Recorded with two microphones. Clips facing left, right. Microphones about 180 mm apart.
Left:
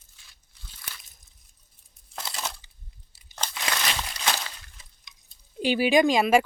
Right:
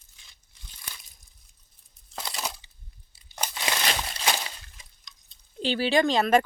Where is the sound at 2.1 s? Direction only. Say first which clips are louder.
Right 1 dB; centre (ahead or behind).